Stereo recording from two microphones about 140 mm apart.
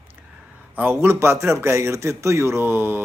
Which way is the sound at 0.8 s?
15° right (ahead or behind).